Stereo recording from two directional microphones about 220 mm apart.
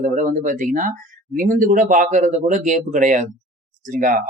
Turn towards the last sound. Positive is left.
turn(degrees=-35)  # may be behind; listen again after turning